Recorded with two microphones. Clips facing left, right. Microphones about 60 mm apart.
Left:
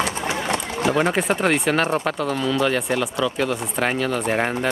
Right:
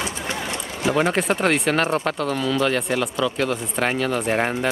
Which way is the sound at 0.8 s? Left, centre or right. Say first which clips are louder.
Even; centre.